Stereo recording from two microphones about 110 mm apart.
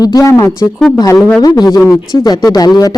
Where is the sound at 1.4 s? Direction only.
40° left (ahead or behind).